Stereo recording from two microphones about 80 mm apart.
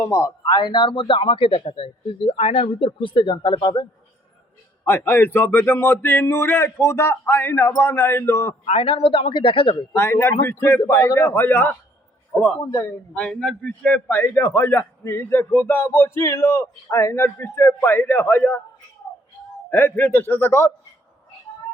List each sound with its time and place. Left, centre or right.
0.0 s a man's voice: left
0.4 s a man's voice: left
4.9 s a man's voice: left
9.3 s a man's voice: left
9.9 s a man's voice: left
12.3 s a man's voice: centre
19.7 s a man's voice: left